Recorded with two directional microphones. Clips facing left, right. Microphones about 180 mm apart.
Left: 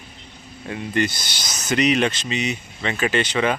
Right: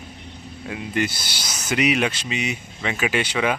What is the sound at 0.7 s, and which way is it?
Speech, 5° right (ahead or behind).